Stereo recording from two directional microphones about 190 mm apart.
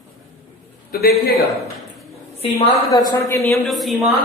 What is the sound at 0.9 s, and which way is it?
Speech, 55° left (ahead or behind).